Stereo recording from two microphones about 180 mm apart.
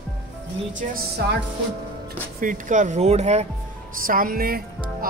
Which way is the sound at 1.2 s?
65° right (ahead or behind).